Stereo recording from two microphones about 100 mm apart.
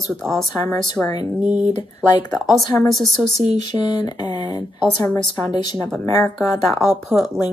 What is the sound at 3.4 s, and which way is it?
Speech, 45° left (ahead or behind).